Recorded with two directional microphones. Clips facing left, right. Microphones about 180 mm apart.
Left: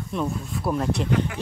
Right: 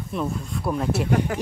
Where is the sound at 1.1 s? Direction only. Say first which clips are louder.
Right 4 dB; 40° right (ahead or behind).